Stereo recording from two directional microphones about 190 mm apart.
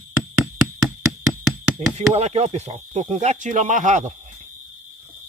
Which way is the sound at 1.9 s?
35° right (ahead or behind).